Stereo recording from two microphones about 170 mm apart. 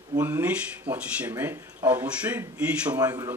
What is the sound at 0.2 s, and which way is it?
Speech, 10° right (ahead or behind).